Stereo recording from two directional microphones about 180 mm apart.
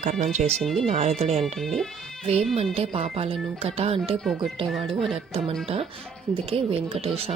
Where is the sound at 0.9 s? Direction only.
40° right (ahead or behind).